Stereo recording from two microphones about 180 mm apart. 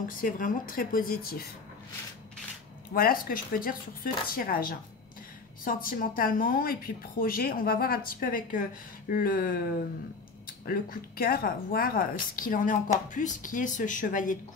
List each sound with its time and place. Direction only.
0.2 s speech: 50° left (ahead or behind)
2.9 s speech: 55° left (ahead or behind)
10.6 s speech: 50° left (ahead or behind)